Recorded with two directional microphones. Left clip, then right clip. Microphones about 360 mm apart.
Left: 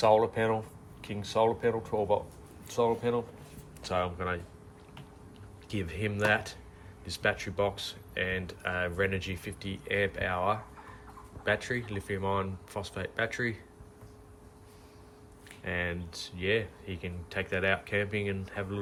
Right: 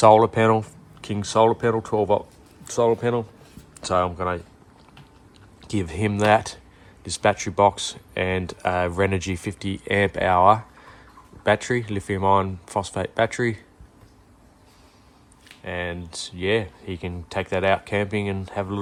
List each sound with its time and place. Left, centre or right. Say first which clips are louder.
0.0 s speech: right 10 dB; right
5.6 s speech: right 9 dB; centre
15.6 s speech: right 4 dB; centre